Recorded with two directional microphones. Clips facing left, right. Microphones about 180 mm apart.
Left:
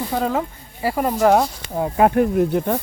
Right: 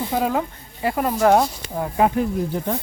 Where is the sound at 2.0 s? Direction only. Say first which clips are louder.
Left 4 dB; 60° left (ahead or behind).